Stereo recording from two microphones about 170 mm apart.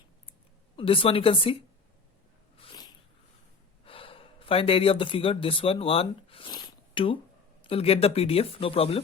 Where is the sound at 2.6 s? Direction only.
30° left (ahead or behind).